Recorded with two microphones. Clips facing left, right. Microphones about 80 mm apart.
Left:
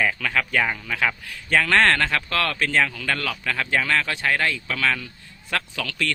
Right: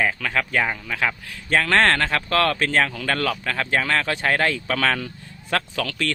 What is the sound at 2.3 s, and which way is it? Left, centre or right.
Speech, right.